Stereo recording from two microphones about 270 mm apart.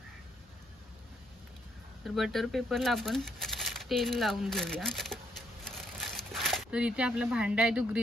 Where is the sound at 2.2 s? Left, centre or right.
Centre.